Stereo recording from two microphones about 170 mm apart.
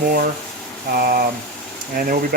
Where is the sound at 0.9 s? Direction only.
60° right (ahead or behind).